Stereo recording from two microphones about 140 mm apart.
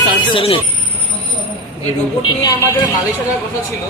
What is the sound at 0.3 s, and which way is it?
Speech, 40° left (ahead or behind).